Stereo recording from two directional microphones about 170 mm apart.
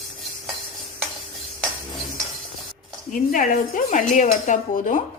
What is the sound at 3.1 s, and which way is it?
Cutlery, 50° left (ahead or behind).